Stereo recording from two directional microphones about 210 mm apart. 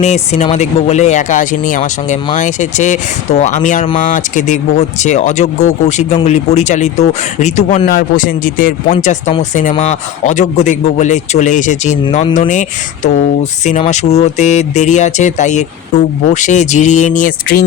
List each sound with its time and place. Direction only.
0.0 s speech: 35° left (ahead or behind)